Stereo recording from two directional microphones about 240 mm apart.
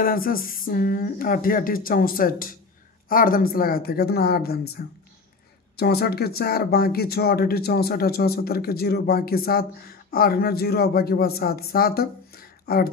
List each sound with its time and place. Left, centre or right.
0.0 s speech: left